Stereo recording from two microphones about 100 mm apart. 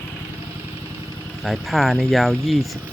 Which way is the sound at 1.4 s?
Centre (ahead or behind).